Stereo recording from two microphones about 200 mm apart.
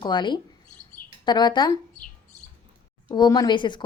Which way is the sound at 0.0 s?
20° left (ahead or behind).